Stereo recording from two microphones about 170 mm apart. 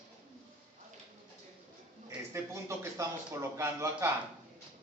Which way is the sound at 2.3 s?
15° right (ahead or behind).